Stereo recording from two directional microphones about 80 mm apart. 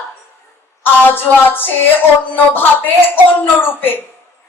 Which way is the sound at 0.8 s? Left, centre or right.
Left.